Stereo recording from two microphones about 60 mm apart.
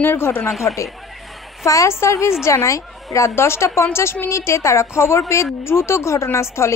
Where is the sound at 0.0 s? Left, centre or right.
Left.